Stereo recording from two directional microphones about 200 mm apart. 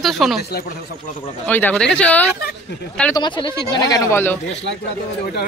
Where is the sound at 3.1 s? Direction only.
25° left (ahead or behind).